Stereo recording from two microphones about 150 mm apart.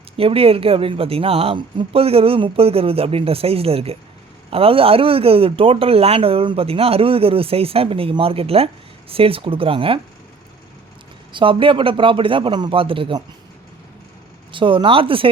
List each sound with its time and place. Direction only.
0.2 s speech: 40° right (ahead or behind)
11.3 s speech: 35° right (ahead or behind)
14.5 s speech: 35° right (ahead or behind)